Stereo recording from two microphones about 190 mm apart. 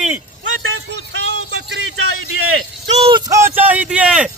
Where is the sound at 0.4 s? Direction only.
90° right.